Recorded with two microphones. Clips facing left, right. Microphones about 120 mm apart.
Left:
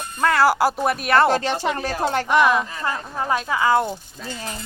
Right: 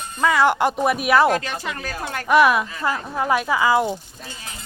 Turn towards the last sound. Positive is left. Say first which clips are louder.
# right 1 dB
turn(degrees=-5)  # may be behind; listen again after turning